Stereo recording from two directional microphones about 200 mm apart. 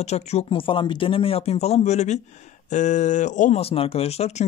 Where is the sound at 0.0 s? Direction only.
35° left (ahead or behind).